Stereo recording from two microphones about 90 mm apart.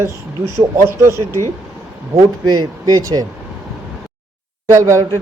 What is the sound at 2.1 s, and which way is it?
Speech, 45° right (ahead or behind).